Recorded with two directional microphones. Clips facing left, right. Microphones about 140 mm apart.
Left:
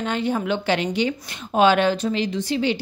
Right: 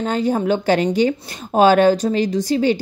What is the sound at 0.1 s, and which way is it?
Speech, 40° right (ahead or behind).